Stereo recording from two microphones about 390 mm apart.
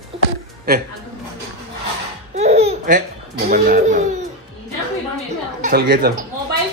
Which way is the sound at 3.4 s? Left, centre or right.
Right.